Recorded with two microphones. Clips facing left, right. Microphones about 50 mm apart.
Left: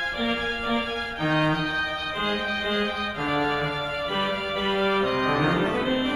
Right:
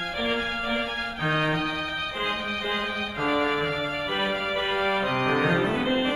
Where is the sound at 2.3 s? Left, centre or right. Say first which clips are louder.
Left 4 dB; right.